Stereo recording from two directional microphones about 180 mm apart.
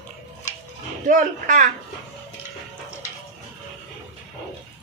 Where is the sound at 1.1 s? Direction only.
45° right (ahead or behind).